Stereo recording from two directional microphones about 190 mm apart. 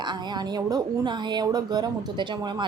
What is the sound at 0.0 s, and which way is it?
Speech, 25° right (ahead or behind).